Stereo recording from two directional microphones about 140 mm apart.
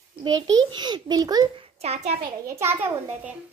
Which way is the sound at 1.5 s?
45° right (ahead or behind).